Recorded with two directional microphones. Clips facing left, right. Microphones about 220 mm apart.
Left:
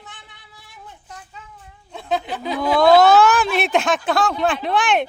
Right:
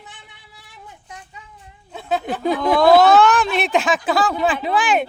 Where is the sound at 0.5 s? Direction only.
10° right (ahead or behind).